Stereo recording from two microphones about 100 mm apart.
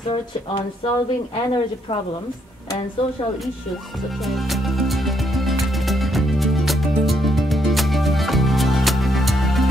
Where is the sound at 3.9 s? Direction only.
Centre (ahead or behind).